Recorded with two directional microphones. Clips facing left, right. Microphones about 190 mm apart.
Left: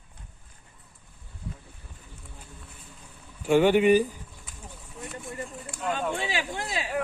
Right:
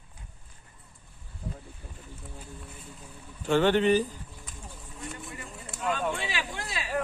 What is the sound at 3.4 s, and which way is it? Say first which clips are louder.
Speech: left 3 dB; 10° left (ahead or behind).